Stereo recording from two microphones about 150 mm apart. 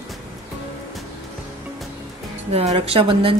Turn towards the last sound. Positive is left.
turn(degrees=-35)  # may be behind; listen again after turning